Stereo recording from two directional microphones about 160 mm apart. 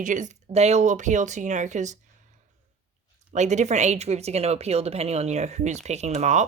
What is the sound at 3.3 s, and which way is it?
Speech, 45° right (ahead or behind).